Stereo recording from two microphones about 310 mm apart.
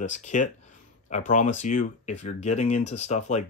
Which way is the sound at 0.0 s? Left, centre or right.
Left.